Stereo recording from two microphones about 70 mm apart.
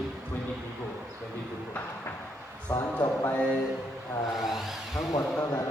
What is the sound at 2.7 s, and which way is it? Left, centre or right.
Speech, left.